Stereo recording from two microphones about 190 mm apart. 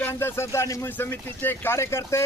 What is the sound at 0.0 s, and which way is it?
A man's voice, 10° left (ahead or behind).